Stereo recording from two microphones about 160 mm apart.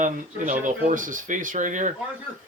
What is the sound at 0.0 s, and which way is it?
Speech, 55° right (ahead or behind).